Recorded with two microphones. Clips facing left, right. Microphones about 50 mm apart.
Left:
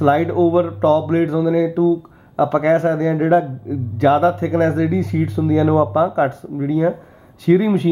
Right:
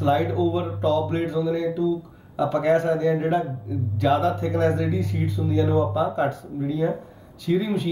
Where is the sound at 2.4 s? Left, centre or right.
Left.